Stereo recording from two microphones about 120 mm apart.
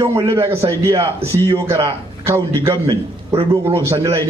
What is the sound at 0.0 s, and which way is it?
A man's voice, 25° right (ahead or behind).